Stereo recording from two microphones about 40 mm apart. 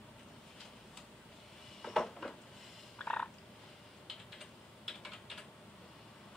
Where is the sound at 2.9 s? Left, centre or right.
Left.